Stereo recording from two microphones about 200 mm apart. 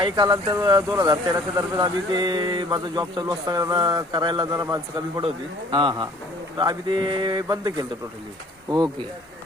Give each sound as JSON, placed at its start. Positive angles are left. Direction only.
{"t": 0.0, "sound": "speech", "side_deg": -20}